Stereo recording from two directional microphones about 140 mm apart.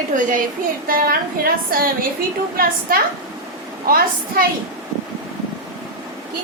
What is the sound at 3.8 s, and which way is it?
Speech, 90° right.